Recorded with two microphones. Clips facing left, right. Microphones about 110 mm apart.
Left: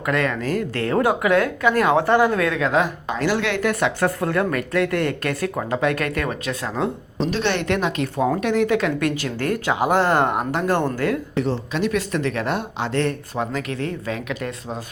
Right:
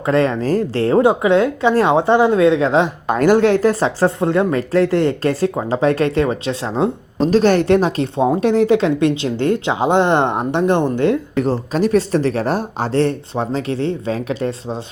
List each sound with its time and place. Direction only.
0.0 s a woman's voice: 30° right (ahead or behind)
3.1 s a woman's voice: 50° right (ahead or behind); by 6.9 s 25° right (ahead or behind)
7.2 s a woman's voice: 40° right (ahead or behind); by 11.2 s 25° right (ahead or behind)
11.3 s speech: 40° right (ahead or behind)